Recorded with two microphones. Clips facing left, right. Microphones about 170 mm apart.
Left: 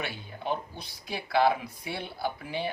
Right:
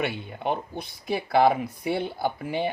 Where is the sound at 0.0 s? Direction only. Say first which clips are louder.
Right 7 dB; 60° right (ahead or behind).